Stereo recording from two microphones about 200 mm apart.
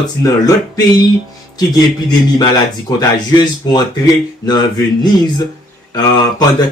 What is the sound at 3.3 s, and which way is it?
Speech, 20° left (ahead or behind).